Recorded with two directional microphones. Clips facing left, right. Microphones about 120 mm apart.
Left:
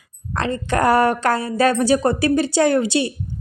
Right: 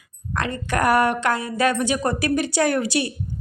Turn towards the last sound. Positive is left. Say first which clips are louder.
# left 4 dB
turn(degrees=25)  # may be behind; listen again after turning